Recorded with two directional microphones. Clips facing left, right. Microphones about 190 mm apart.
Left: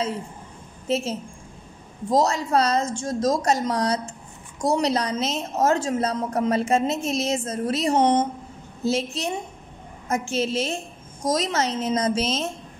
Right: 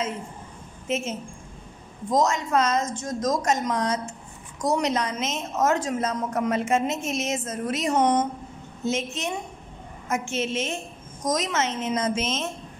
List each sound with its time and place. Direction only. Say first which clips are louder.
0.8 s a woman's voice: left 3 dB; 35° left (ahead or behind)